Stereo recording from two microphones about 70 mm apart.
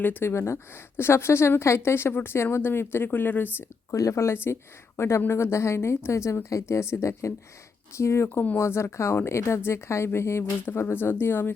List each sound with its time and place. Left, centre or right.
0.0 s a woman's voice: left
3.9 s a woman's voice: left